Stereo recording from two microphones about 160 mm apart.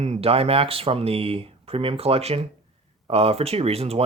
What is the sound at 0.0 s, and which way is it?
Speech, 40° right (ahead or behind).